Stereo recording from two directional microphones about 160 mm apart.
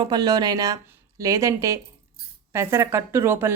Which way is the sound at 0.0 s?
25° right (ahead or behind).